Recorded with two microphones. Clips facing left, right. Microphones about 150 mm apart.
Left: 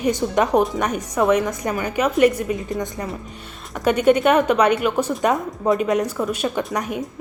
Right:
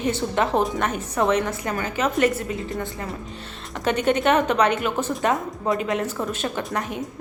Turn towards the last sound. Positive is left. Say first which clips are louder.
# left 4 dB
turn(degrees=15)  # may be behind; listen again after turning